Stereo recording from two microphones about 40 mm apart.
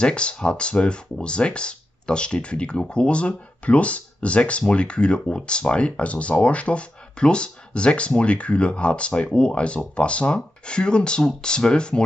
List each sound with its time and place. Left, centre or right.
0.0 s speech: left